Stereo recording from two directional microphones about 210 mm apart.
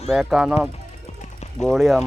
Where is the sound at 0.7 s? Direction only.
30° left (ahead or behind).